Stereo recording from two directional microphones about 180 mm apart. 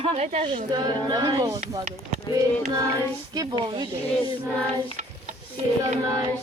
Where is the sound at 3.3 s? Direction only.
20° right (ahead or behind).